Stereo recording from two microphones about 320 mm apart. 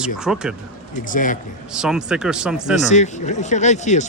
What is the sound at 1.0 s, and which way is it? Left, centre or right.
Speech, left.